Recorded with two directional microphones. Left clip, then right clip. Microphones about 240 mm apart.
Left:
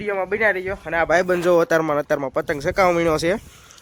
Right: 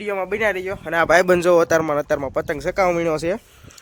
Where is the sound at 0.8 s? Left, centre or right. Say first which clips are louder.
Right 5 dB; right.